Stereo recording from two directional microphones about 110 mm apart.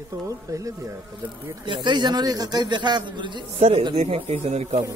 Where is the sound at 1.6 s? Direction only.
45° right (ahead or behind).